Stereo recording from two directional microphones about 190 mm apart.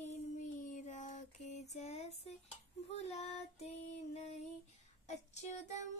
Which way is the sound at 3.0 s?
35° left (ahead or behind).